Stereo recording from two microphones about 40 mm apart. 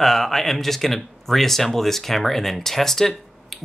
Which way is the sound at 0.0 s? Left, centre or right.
Centre.